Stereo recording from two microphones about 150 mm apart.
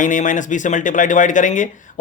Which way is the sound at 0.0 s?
55° left (ahead or behind).